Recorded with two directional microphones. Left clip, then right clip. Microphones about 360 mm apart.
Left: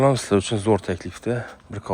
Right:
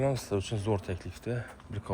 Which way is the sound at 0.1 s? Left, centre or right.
Left.